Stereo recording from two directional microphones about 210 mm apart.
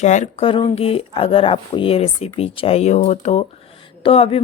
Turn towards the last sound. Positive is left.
turn(degrees=25)  # may be behind; listen again after turning